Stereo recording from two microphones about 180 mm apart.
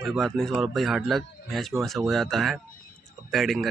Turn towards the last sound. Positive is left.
turn(degrees=0)  # may be behind; listen again after turning